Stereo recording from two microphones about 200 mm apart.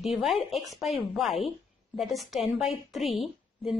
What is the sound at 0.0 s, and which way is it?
Speech, centre (ahead or behind).